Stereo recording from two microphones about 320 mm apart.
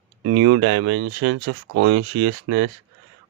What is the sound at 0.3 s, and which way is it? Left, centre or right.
Speech, right.